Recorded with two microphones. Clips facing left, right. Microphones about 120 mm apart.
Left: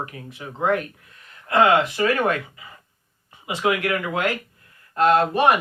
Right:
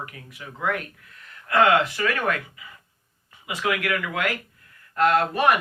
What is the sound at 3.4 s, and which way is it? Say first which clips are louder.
Speech: left 4 dB; 25° left (ahead or behind).